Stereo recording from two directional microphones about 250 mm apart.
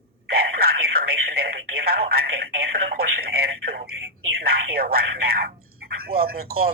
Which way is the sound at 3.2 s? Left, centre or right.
Right.